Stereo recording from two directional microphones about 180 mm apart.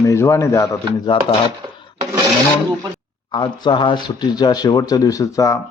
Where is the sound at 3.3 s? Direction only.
25° left (ahead or behind).